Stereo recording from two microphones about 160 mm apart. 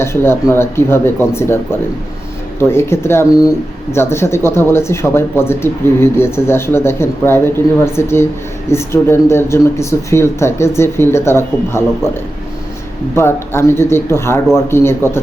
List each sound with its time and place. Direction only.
0.0 s speech: 15° left (ahead or behind)
13.1 s speech: 15° left (ahead or behind)